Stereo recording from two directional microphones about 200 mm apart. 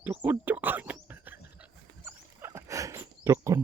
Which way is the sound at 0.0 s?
10° right (ahead or behind).